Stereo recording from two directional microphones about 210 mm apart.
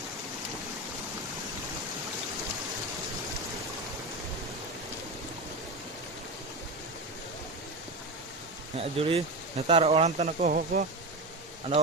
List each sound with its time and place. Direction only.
8.8 s speech: 25° right (ahead or behind)